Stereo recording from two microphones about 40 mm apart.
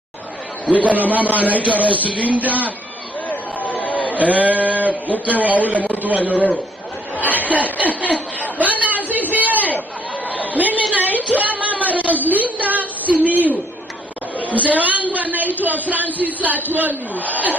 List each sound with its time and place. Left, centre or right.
0.8 s a man's voice: right
3.3 s a sound: left
4.1 s sheep: right
5.2 s a man's voice: right
7.9 s chuckle: left
8.4 s chatter: right
11.2 s a sound: right
15.6 s a man's voice: right